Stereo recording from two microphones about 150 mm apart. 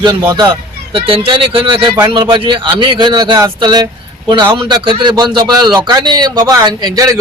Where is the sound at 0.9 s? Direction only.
35° right (ahead or behind).